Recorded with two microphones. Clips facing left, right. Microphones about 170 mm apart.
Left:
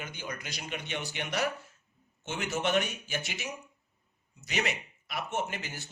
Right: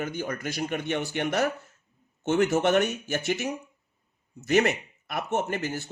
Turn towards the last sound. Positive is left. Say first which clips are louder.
# right 7 dB
turn(degrees=-50)  # may be behind; listen again after turning